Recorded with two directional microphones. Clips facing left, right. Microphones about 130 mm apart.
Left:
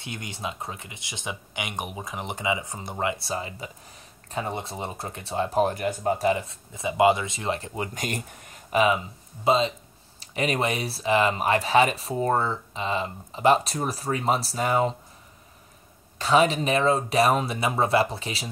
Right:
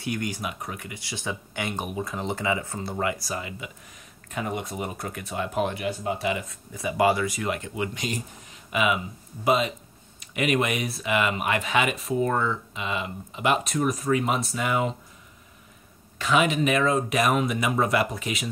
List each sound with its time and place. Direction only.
0.0 s speech: 25° left (ahead or behind)
16.2 s speech: 35° left (ahead or behind)